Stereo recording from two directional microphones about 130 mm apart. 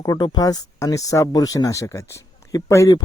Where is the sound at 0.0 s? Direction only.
30° left (ahead or behind).